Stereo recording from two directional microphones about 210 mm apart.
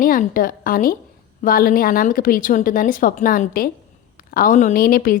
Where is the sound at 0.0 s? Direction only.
40° left (ahead or behind).